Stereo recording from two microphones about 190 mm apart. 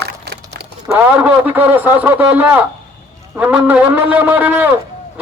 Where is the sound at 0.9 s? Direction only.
10° right (ahead or behind).